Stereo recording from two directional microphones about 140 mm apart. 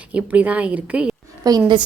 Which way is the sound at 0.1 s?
10° right (ahead or behind).